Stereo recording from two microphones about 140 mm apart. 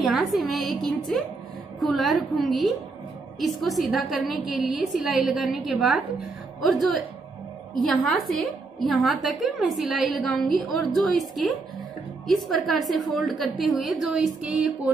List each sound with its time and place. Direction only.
0.1 s a woman's voice: centre (ahead or behind)